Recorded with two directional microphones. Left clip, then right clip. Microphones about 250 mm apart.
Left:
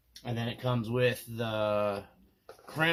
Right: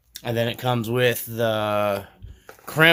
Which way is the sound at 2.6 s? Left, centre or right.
Right.